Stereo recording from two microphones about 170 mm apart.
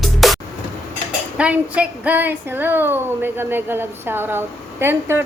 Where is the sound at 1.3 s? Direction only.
10° right (ahead or behind).